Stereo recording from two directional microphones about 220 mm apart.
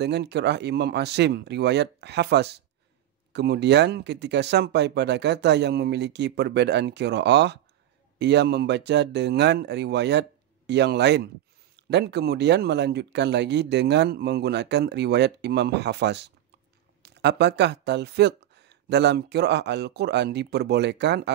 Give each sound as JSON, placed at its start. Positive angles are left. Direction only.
{"t": 0.0, "sound": "speech", "side_deg": -50}